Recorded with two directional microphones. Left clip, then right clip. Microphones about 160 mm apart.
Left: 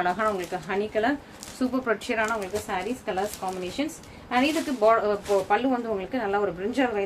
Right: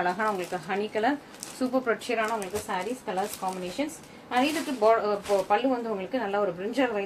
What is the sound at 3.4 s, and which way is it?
A woman's voice, 45° left (ahead or behind).